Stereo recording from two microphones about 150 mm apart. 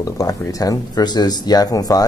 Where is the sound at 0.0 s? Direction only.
25° left (ahead or behind).